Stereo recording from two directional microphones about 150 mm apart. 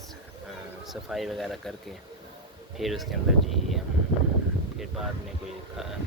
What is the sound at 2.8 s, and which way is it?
Speech, centre (ahead or behind).